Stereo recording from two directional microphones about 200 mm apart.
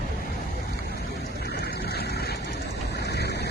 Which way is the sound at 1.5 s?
55° left (ahead or behind).